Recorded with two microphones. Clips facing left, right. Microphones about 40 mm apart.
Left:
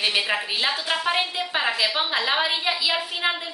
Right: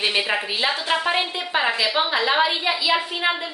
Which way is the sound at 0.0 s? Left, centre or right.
Centre.